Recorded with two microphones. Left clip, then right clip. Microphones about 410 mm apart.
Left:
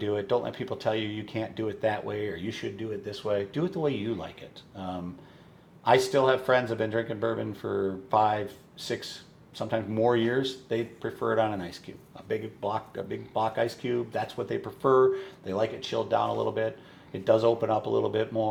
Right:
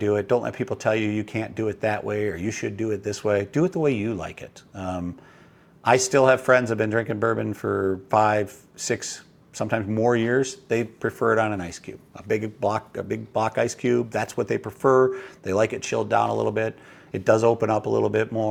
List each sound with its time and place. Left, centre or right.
0.0 s speech: right
9.6 s speech: right
12.1 s speech: right